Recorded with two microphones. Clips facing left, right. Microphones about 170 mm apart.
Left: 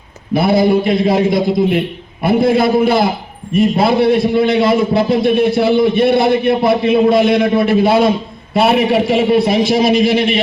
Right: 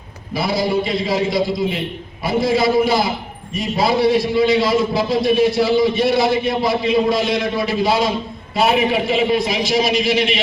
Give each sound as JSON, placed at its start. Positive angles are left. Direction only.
{"t": 0.3, "sound": "a man's voice", "side_deg": 55}